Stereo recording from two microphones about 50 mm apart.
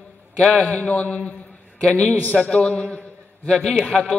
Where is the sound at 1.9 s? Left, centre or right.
Centre.